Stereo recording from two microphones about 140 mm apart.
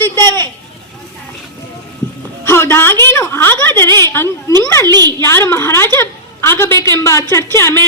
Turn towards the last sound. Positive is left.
turn(degrees=15)  # may be behind; listen again after turning